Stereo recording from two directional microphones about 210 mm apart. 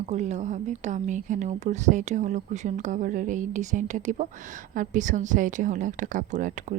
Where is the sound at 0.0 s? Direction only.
35° right (ahead or behind).